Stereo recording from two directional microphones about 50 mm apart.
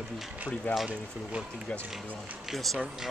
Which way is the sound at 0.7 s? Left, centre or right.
Left.